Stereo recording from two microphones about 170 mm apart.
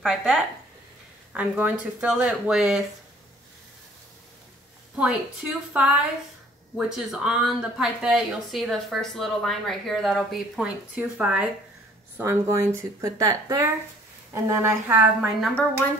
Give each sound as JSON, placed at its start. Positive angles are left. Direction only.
{"t": 0.0, "sound": "speech", "side_deg": -5}
{"t": 4.9, "sound": "speech", "side_deg": -5}